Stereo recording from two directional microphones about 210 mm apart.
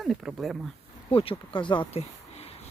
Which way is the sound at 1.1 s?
25° left (ahead or behind).